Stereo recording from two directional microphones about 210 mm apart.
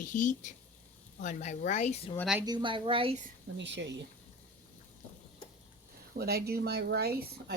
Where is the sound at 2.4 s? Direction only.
20° right (ahead or behind).